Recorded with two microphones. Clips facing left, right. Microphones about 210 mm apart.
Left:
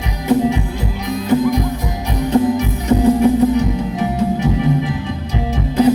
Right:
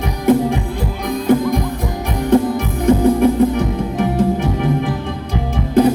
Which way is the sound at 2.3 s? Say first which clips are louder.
Right 1 dB; 55° right (ahead or behind).